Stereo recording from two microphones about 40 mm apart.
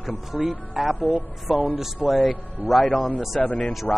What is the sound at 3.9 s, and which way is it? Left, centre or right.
Speech, left.